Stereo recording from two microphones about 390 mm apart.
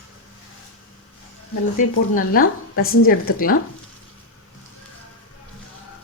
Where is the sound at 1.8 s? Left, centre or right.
Left.